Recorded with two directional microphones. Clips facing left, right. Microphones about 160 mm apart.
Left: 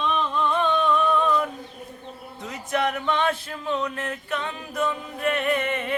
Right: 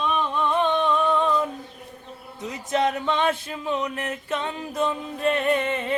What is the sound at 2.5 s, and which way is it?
Speech, 20° right (ahead or behind).